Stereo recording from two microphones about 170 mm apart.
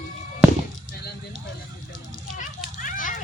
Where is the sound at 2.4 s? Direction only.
50° left (ahead or behind).